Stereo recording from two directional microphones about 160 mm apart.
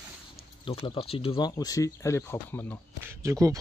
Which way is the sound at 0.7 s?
35° left (ahead or behind).